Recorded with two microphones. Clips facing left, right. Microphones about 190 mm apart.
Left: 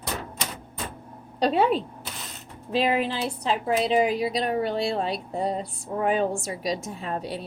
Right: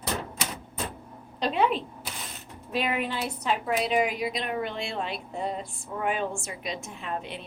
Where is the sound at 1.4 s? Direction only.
40° left (ahead or behind).